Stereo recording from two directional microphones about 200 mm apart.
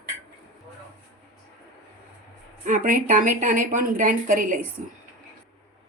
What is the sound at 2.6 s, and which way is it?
A woman's voice, 40° right (ahead or behind).